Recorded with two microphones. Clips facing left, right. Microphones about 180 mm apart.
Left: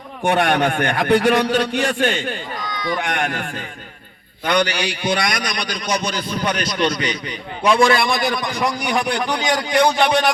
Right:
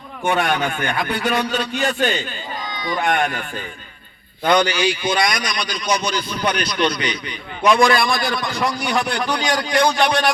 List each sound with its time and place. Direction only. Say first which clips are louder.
0.2 s a man's voice: left 3 dB; 75° left (ahead or behind)
2.6 s a sound: left 2 dB; 25° right (ahead or behind)
3.0 s speech: right 3 dB; 80° left
4.5 s a man's voice: right 2 dB; 65° left (ahead or behind); by 10.3 s 20° left (ahead or behind)